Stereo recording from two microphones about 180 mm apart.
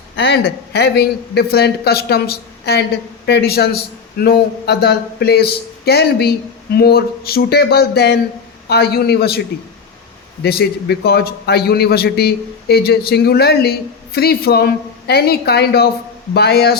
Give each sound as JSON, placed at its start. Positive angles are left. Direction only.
{"t": 0.2, "sound": "speech", "side_deg": 70}
{"t": 10.4, "sound": "speech", "side_deg": 65}